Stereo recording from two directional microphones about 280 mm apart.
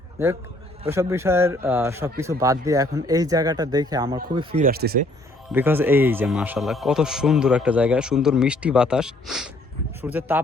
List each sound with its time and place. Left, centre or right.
0.9 s speech: centre
4.6 s speech: right
5.5 s a man's voice: centre